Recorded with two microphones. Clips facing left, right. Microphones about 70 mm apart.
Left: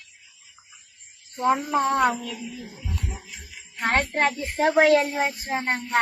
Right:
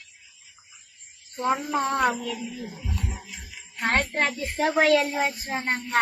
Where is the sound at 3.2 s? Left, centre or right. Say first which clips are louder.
Even; centre.